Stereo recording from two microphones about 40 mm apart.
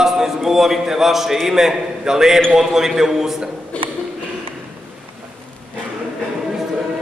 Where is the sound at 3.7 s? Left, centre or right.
Left.